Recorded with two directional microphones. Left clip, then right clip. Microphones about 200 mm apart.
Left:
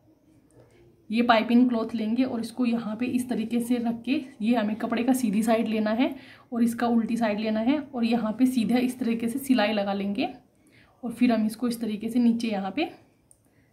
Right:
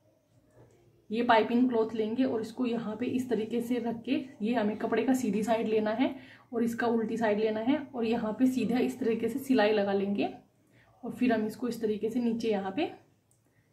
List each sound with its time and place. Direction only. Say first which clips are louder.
1.1 s speech: left 3 dB; 50° left (ahead or behind)